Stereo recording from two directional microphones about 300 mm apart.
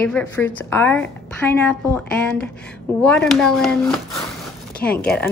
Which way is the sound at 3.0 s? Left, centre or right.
Centre.